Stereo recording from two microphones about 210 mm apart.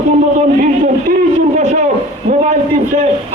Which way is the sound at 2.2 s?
35° right (ahead or behind).